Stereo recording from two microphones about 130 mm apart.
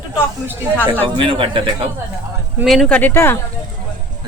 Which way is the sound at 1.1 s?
40° right (ahead or behind).